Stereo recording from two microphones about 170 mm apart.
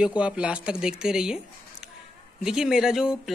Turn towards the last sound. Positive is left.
turn(degrees=-5)  # may be behind; listen again after turning